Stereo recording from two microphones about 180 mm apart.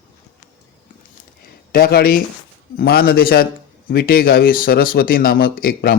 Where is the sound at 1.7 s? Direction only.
60° left (ahead or behind).